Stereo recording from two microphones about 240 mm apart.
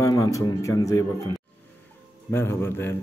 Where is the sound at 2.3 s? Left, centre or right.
Centre.